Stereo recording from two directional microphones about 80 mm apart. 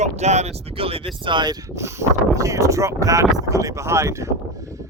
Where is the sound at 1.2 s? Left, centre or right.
Right.